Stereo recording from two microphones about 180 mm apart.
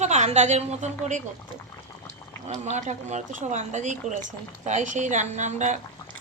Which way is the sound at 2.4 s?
40° right (ahead or behind).